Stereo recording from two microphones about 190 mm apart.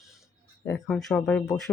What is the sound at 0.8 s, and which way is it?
Speech, 5° left (ahead or behind).